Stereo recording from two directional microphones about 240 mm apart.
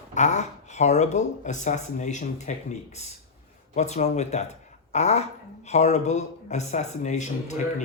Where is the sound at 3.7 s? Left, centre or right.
Left.